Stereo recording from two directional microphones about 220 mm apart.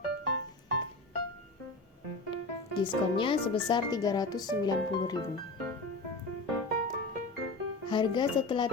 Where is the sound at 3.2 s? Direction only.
25° left (ahead or behind).